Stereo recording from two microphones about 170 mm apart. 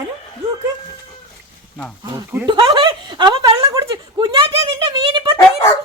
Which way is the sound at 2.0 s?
15° right (ahead or behind).